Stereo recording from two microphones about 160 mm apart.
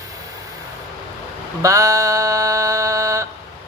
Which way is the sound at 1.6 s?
20° right (ahead or behind).